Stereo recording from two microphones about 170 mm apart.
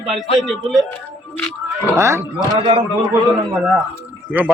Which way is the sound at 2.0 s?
15° right (ahead or behind).